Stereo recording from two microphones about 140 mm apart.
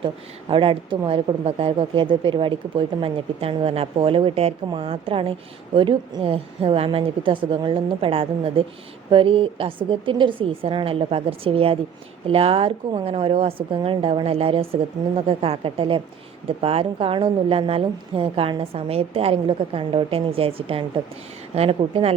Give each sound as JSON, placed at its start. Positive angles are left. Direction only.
{"t": 0.0, "sound": "a woman's voice", "side_deg": -40}